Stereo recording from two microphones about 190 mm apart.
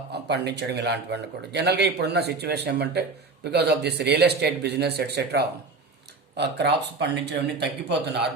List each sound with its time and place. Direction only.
0.1 s speech: 65° right (ahead or behind)